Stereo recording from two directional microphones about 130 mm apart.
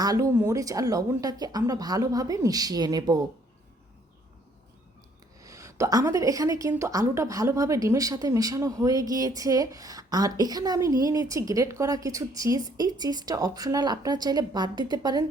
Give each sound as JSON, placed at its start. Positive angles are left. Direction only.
{"t": 0.0, "sound": "a woman's voice", "side_deg": -30}
{"t": 5.4, "sound": "a woman's voice", "side_deg": -25}